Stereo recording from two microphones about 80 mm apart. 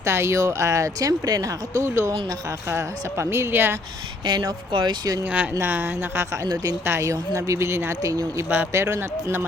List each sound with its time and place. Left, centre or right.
0.0 s speech: right
4.7 s speech: right
5.2 s speech: centre
6.8 s speech: right